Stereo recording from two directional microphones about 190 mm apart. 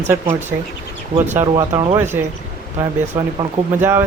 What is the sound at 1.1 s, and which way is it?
Speech, 15° right (ahead or behind).